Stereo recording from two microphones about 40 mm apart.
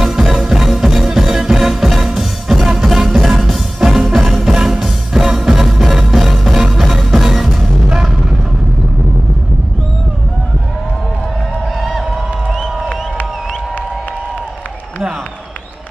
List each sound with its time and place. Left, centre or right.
0.0 s music: centre